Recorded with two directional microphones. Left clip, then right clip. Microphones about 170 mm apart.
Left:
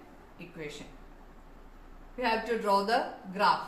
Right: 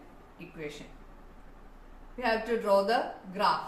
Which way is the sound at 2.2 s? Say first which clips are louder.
Even; 35° left (ahead or behind).